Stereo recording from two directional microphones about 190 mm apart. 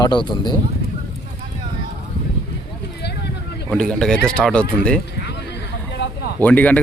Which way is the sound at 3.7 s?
5° left (ahead or behind).